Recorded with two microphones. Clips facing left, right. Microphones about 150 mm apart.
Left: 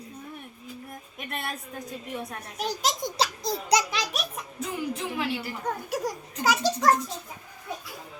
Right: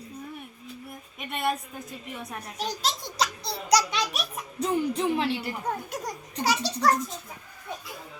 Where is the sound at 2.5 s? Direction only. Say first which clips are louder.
Left 2 dB; 10° left (ahead or behind).